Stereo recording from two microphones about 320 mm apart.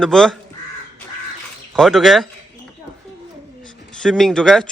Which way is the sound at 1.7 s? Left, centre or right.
Centre.